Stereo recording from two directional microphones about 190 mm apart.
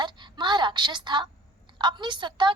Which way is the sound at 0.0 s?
25° right (ahead or behind).